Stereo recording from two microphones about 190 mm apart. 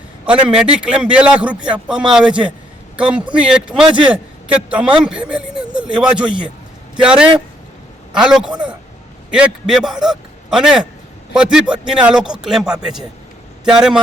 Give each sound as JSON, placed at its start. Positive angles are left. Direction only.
{"t": 0.3, "sound": "a man's voice", "side_deg": -5}
{"t": 3.8, "sound": "a man's voice", "side_deg": -25}
{"t": 4.1, "sound": "a man's voice", "side_deg": -5}